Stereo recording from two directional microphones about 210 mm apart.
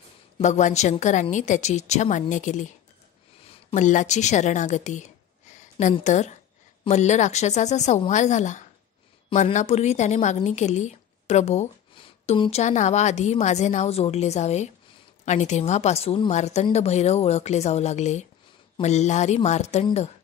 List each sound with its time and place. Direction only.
0.4 s a woman's voice: 35° left (ahead or behind)
3.7 s a woman's voice: 35° left (ahead or behind)